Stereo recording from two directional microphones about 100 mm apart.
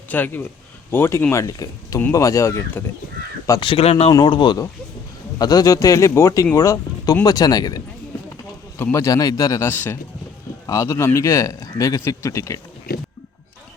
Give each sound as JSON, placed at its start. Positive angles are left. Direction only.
{"t": 0.1, "sound": "a man's voice", "side_deg": 20}
{"t": 2.8, "sound": "speech", "side_deg": 20}
{"t": 3.6, "sound": "speech", "side_deg": 70}
{"t": 4.2, "sound": "speech", "side_deg": 50}
{"t": 5.4, "sound": "a man's voice", "side_deg": 40}
{"t": 8.8, "sound": "a man's voice", "side_deg": 30}
{"t": 9.6, "sound": "a man's voice", "side_deg": 20}